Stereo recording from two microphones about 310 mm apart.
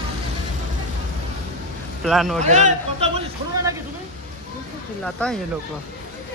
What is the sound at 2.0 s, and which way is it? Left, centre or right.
Speech, centre.